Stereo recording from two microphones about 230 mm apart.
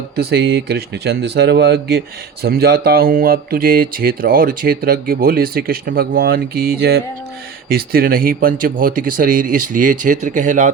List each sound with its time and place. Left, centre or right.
0.2 s speech: right